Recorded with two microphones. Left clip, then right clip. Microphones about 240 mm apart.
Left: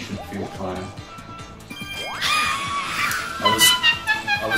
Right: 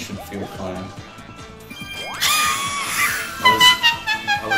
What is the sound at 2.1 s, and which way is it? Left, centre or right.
Music, right.